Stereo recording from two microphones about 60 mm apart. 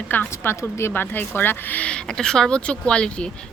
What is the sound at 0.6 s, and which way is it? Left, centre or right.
Speech, left.